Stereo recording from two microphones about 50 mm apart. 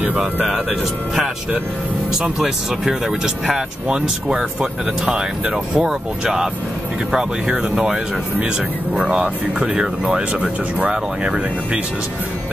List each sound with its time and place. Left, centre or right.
0.0 s speech: right
2.3 s speech: centre